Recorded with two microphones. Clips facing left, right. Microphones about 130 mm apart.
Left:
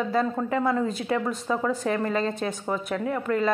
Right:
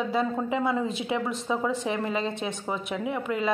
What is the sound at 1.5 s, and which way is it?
Speech, 10° right (ahead or behind).